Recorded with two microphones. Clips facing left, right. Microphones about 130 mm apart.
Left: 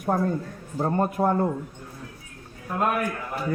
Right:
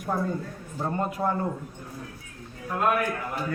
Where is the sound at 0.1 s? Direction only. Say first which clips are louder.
Even; 40° left (ahead or behind).